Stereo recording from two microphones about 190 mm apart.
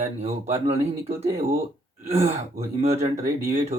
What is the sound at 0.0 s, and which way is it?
Speech, 35° right (ahead or behind).